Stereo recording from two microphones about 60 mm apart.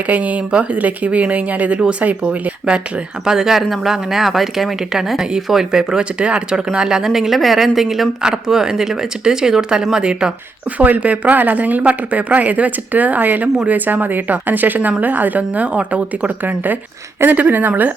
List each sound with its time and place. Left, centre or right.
0.1 s speech: right
3.2 s speech: centre
10.8 s speech: right